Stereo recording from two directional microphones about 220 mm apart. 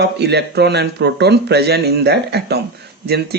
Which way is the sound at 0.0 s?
50° right (ahead or behind).